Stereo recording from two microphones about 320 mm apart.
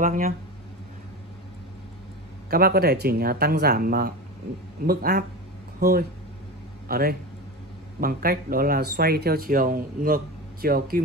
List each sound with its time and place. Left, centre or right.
0.0 s speech: right
2.5 s speech: right